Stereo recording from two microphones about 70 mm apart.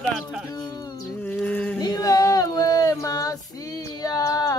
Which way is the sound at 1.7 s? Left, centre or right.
Left.